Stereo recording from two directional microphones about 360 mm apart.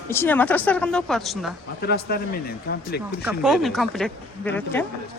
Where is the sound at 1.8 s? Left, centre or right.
Left.